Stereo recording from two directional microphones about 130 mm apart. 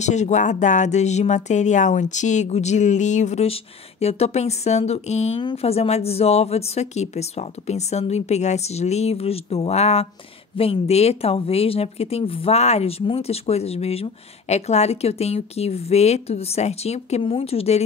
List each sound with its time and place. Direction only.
0.0 s a woman's voice: 65° left (ahead or behind)